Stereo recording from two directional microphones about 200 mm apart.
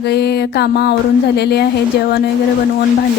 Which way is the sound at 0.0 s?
55° left (ahead or behind).